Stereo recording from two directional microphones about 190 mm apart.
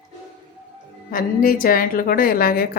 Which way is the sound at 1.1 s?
50° left (ahead or behind).